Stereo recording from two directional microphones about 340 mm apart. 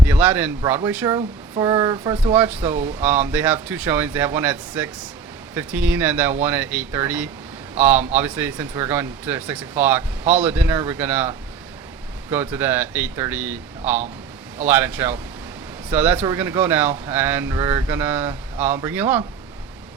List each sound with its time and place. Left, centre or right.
0.1 s speech: centre